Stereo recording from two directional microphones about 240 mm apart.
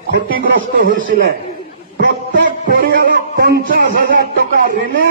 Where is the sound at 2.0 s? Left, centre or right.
Right.